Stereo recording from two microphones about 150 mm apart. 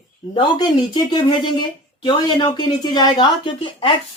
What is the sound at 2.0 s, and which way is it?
Speech, 30° left (ahead or behind).